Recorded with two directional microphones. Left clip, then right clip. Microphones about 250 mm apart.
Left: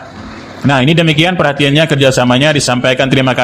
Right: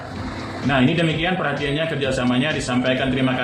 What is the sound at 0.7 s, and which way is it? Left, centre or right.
A man's voice, left.